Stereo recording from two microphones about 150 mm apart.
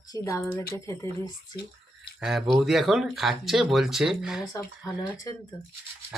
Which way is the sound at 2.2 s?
Centre (ahead or behind).